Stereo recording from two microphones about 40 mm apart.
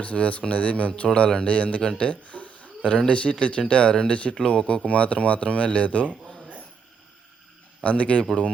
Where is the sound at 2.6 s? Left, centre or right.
Left.